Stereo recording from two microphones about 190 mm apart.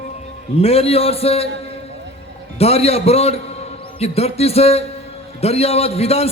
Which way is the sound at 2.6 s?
30° left (ahead or behind).